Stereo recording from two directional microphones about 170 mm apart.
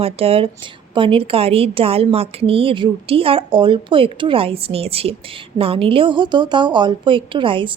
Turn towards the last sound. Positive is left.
turn(degrees=-30)  # may be behind; listen again after turning